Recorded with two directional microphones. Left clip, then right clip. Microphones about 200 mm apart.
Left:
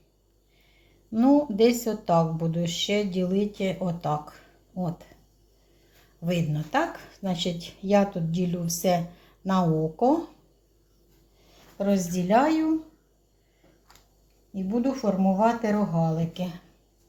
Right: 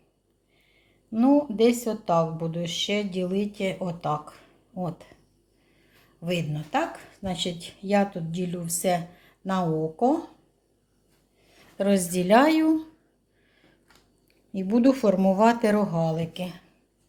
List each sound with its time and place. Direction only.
1.1 s speech: centre (ahead or behind)
6.2 s speech: 5° right (ahead or behind)
11.8 s speech: 35° right (ahead or behind)
14.5 s speech: 50° right (ahead or behind); by 16.2 s 35° right (ahead or behind)
16.2 s speech: 10° right (ahead or behind)